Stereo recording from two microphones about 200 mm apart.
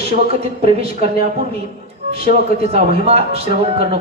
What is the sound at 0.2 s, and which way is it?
Speech, 30° right (ahead or behind).